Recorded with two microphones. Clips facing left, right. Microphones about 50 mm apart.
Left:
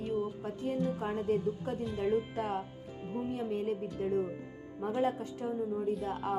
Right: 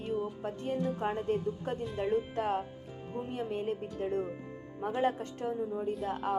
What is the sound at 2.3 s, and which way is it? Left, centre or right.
Speech, right.